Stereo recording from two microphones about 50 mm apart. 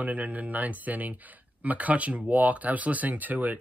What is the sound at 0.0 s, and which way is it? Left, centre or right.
Speech, right.